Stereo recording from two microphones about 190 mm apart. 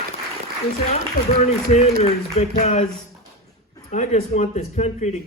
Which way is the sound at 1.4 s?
35° left (ahead or behind).